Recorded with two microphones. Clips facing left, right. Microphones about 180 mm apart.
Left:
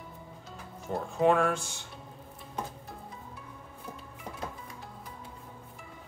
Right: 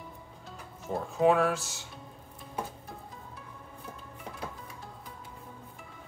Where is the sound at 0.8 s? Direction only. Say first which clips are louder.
Right 1 dB; centre (ahead or behind).